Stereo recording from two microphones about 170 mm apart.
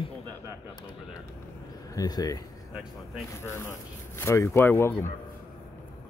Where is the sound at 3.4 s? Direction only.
15° left (ahead or behind).